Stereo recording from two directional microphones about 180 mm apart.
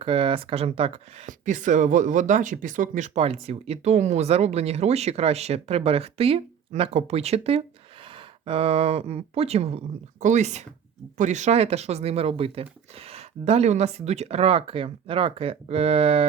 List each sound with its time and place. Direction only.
0.0 s speech: 30° right (ahead or behind)
1.3 s speech: 45° right (ahead or behind)